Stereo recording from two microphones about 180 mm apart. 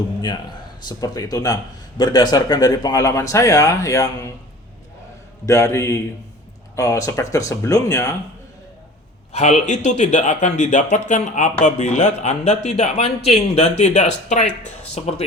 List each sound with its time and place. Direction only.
0.9 s speech: 20° left (ahead or behind)
5.5 s speech: 15° left (ahead or behind)
9.3 s speech: 40° left (ahead or behind)